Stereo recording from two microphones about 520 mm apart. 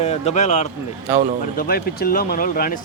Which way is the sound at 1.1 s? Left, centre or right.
Centre.